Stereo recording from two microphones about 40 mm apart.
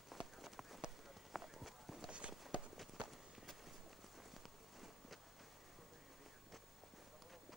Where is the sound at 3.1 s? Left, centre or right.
Centre.